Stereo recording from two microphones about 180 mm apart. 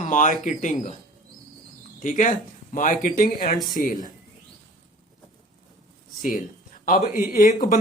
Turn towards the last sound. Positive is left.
turn(degrees=45)  # may be behind; listen again after turning